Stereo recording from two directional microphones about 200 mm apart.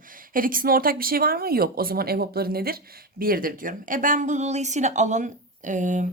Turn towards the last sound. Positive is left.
turn(degrees=-40)  # may be behind; listen again after turning